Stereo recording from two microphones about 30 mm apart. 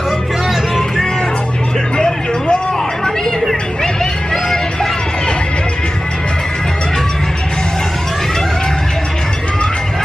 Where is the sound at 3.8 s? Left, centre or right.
Left.